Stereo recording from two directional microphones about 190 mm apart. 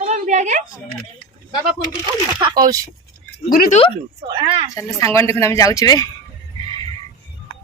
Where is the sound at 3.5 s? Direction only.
50° left (ahead or behind).